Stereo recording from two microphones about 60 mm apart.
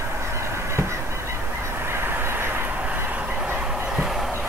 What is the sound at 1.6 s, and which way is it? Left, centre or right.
Fowl, right.